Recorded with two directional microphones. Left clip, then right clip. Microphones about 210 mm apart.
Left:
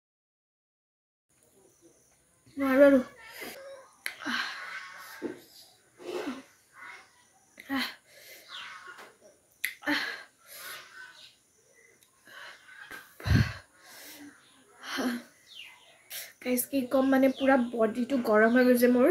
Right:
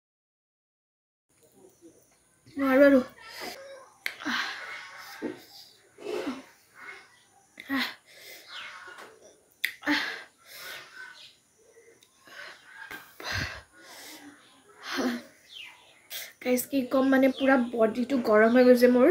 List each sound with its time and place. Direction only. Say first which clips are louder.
2.4 s speech: right 1 dB; 5° right (ahead or behind)
3.4 s wheeze: right 3 dB; 5° right (ahead or behind)
5.4 s dog: right 4 dB; centre (ahead or behind)
7.5 s wheeze: right 2 dB; centre (ahead or behind)
9.6 s finger snapping: right 3 dB; 5° right (ahead or behind)
12.3 s chicken: right 3 dB; centre (ahead or behind)
13.2 s a sound: even; 5° right (ahead or behind)
16.1 s speech: right 4 dB; 5° right (ahead or behind)